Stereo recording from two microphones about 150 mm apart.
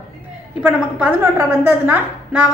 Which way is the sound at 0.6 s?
5° right (ahead or behind).